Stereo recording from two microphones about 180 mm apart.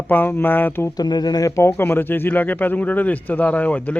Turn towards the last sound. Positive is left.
turn(degrees=10)  # may be behind; listen again after turning